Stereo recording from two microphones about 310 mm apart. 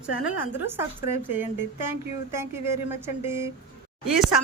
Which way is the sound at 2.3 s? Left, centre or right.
Centre.